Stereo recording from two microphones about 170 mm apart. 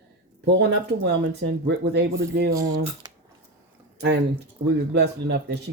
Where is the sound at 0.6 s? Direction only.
90° right.